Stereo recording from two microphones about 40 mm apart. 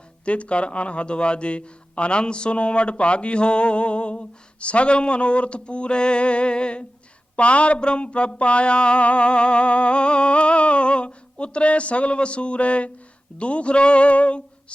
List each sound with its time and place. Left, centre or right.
0.3 s a man's voice: left